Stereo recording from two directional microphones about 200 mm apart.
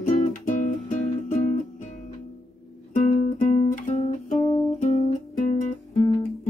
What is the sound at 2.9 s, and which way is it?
Guitar, 35° left (ahead or behind).